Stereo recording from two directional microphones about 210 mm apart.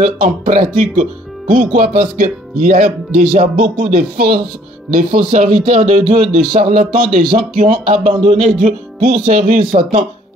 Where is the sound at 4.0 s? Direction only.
45° right (ahead or behind).